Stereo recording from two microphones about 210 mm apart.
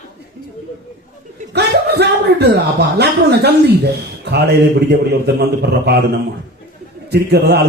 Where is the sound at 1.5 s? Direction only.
50° right (ahead or behind).